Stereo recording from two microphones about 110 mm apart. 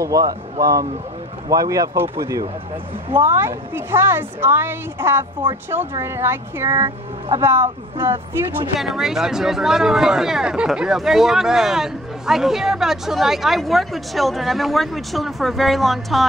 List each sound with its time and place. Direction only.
0.0 s a woman's voice: 35° right (ahead or behind)
8.7 s speech: centre (ahead or behind)